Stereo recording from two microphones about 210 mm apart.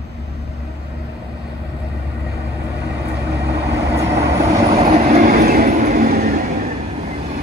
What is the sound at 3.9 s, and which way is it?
Vehicle, 15° right (ahead or behind).